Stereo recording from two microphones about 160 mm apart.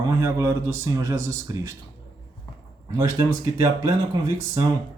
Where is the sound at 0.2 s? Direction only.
20° right (ahead or behind).